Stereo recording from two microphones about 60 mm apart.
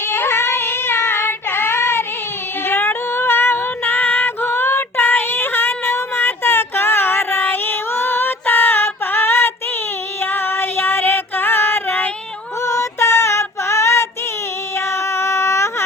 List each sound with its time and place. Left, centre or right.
0.1 s child singing: left
2.6 s female singing: left
12.6 s female singing: left
14.8 s a sound: left